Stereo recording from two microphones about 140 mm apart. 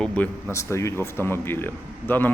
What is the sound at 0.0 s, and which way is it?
A man's voice, 10° left (ahead or behind).